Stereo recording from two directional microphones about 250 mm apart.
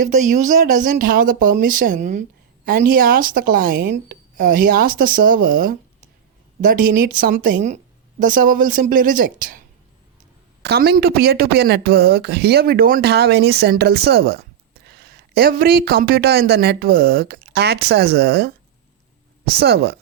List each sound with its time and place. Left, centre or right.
0.0 s speech: right